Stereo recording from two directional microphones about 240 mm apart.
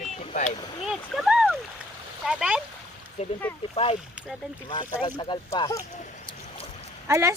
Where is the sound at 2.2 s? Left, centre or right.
Centre.